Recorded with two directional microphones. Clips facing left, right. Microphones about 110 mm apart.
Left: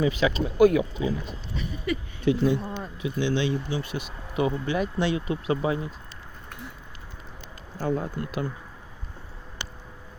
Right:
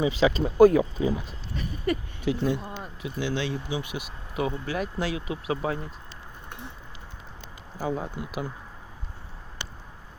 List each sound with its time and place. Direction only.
0.0 s speech: 30° right (ahead or behind)
1.5 s a sound: 45° right (ahead or behind)
2.2 s speech: centre (ahead or behind)
3.7 s speech: 15° right (ahead or behind); by 5.9 s centre (ahead or behind)
7.8 s speech: 5° right (ahead or behind)